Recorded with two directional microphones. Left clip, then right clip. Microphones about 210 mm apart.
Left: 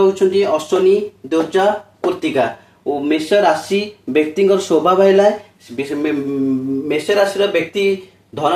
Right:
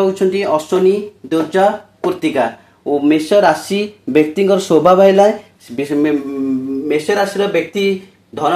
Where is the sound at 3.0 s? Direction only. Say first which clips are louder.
Right 2 dB; 45° right (ahead or behind).